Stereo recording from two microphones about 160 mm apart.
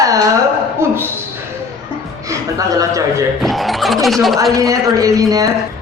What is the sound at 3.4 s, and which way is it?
Speech, centre (ahead or behind).